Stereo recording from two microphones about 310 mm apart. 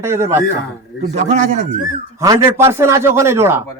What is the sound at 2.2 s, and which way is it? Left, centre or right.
Speech, centre.